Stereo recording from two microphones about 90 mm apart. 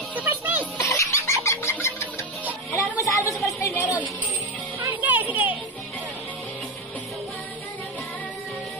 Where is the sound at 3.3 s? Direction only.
Centre (ahead or behind).